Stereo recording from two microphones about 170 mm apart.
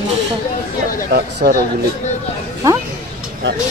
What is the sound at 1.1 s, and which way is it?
Speech, 65° right (ahead or behind).